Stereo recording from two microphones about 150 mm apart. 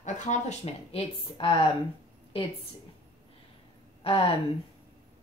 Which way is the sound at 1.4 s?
35° left (ahead or behind).